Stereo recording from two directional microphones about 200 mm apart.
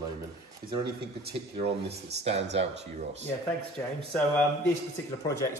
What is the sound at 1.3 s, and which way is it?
Speech, 55° right (ahead or behind).